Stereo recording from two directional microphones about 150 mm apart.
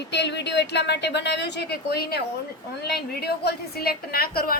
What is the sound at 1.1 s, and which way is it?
A woman's voice, 90° left.